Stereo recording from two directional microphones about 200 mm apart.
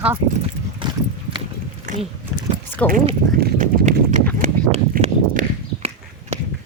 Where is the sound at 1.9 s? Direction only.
40° right (ahead or behind).